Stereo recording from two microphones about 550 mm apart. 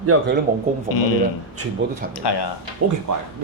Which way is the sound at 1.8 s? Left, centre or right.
Centre.